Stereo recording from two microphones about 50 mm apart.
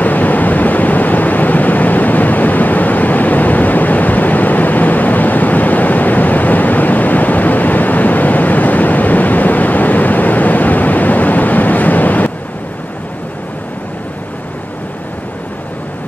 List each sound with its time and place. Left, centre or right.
0.0 s vehicle: left